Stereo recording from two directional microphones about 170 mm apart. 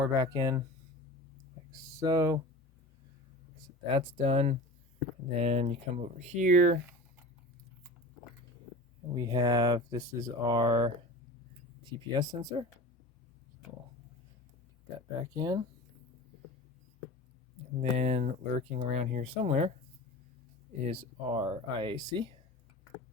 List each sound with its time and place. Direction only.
0.0 s speech: 20° right (ahead or behind)
1.7 s speech: 20° right (ahead or behind)
3.8 s speech: 35° right (ahead or behind)
9.1 s speech: 25° right (ahead or behind)
15.4 s speech: 25° right (ahead or behind)
17.9 s speech: 40° right (ahead or behind)
20.8 s speech: 35° right (ahead or behind)